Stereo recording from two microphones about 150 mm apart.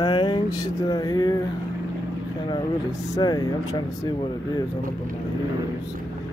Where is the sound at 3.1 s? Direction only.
25° left (ahead or behind).